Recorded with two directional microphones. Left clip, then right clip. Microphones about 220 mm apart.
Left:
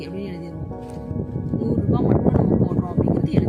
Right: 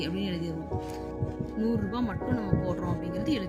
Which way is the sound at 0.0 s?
45° left (ahead or behind).